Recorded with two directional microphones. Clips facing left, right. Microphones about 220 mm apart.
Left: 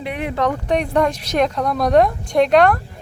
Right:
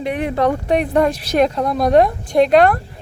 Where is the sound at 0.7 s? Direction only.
5° right (ahead or behind).